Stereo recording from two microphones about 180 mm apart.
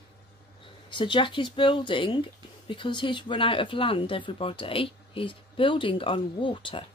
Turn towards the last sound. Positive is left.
turn(degrees=30)  # may be behind; listen again after turning